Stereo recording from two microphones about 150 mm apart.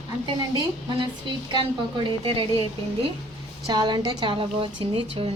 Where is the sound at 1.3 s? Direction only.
30° right (ahead or behind).